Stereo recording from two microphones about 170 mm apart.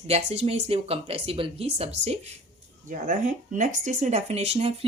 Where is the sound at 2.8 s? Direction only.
50° right (ahead or behind).